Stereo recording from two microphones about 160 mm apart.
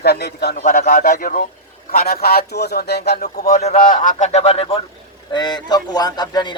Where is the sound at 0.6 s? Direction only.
60° left (ahead or behind).